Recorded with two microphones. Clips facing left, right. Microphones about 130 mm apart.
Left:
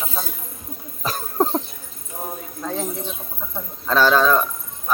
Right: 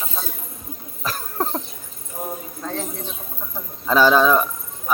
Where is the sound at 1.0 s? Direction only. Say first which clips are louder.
Left 4 dB; 20° left (ahead or behind).